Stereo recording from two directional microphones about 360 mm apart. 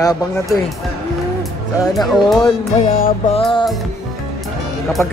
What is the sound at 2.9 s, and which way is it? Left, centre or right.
Music, left.